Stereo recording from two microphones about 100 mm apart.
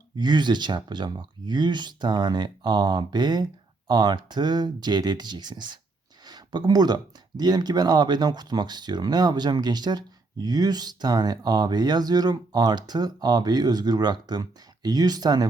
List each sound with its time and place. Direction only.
0.2 s speech: 50° right (ahead or behind)